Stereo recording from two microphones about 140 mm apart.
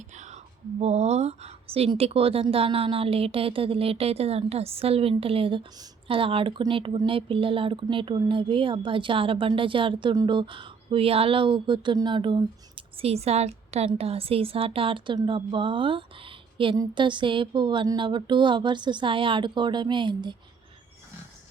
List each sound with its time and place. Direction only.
0.8 s speech: 50° right (ahead or behind); by 20.3 s 35° right (ahead or behind)